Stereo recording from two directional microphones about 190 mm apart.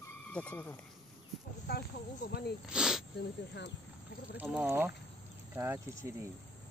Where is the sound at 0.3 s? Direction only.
5° left (ahead or behind).